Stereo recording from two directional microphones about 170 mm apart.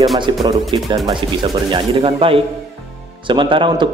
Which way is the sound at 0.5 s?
20° right (ahead or behind).